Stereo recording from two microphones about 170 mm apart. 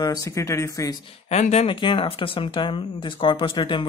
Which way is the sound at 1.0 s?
40° left (ahead or behind).